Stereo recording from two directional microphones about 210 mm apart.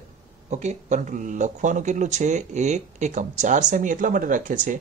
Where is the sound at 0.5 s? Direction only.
35° right (ahead or behind).